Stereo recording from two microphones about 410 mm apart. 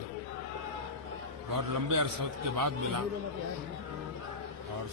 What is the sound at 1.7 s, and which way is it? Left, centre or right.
A man's voice, right.